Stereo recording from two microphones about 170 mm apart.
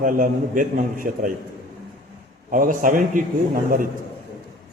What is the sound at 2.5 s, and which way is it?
Speech, 50° right (ahead or behind).